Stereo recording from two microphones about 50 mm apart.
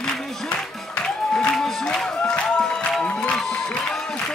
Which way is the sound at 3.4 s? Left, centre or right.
Centre.